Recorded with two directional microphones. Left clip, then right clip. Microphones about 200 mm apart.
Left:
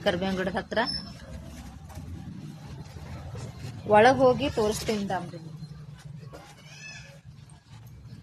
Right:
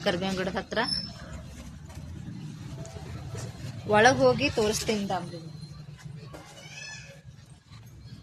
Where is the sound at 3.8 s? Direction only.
20° left (ahead or behind).